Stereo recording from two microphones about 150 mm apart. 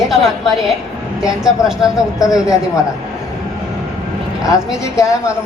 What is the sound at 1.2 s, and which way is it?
Speech, 5° right (ahead or behind).